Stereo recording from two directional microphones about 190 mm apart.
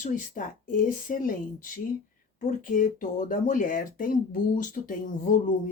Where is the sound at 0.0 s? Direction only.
45° left (ahead or behind).